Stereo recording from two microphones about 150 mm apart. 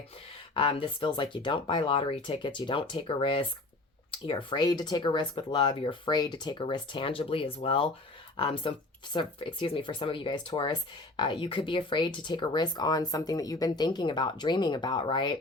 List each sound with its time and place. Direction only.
0.5 s speech: 35° left (ahead or behind)